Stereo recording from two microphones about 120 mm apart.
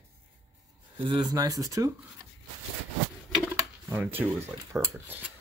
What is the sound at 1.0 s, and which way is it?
Speech, 40° right (ahead or behind).